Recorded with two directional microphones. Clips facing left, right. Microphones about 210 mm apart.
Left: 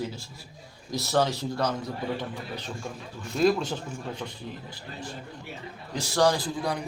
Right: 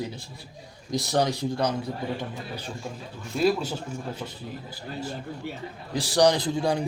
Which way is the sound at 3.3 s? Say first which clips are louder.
Even; 5° right (ahead or behind).